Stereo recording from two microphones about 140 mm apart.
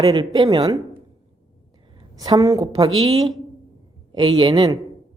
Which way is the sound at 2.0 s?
25° right (ahead or behind).